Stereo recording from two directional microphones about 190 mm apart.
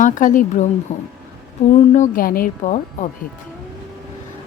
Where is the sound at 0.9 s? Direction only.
35° left (ahead or behind).